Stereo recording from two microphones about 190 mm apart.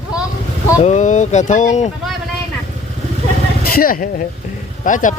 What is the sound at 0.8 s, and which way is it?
Speech, 40° left (ahead or behind).